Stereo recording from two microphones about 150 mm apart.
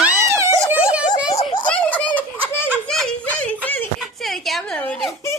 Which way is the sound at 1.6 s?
10° left (ahead or behind).